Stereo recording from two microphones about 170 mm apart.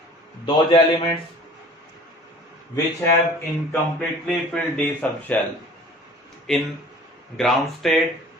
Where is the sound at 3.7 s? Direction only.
10° left (ahead or behind).